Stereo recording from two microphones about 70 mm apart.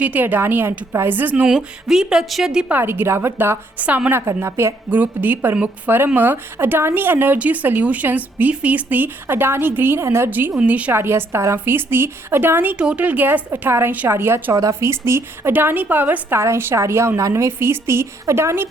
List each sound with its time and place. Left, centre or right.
0.0 s speech: right
1.5 s a woman's voice: centre
2.6 s a woman's voice: right
3.8 s speech: right
4.4 s a woman's voice: right
4.9 s speech: right
10.2 s speech: right
10.9 s a woman's voice: right
12.7 s speech: centre; by 14.5 s right
14.5 s a woman's voice: right
15.5 s a woman's voice: right